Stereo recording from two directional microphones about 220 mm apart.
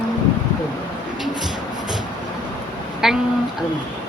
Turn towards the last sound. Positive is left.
turn(degrees=0)  # may be behind; listen again after turning